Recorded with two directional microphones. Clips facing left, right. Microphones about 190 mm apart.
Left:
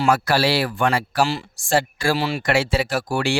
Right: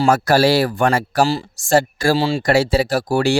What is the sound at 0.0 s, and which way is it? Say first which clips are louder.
Speech: right 4 dB; 45° right (ahead or behind).